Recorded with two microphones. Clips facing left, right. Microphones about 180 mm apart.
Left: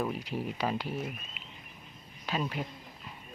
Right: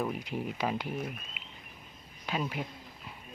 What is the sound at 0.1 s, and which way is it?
Speech, 15° right (ahead or behind).